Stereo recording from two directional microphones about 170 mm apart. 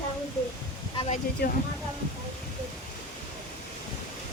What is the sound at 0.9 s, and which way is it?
Speech, 40° left (ahead or behind).